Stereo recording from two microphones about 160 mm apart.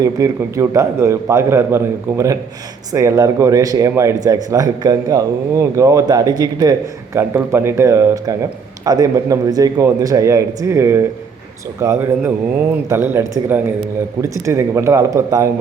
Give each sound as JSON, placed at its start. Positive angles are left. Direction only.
{"t": 0.0, "sound": "a man's voice", "side_deg": -20}